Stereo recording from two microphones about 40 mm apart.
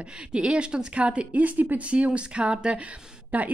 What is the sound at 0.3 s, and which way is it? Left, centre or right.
Speech, right.